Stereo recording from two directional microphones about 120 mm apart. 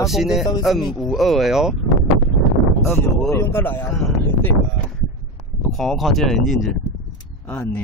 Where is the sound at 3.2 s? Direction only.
20° left (ahead or behind).